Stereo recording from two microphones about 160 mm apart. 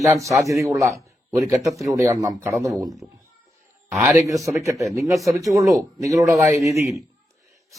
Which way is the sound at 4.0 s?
15° right (ahead or behind).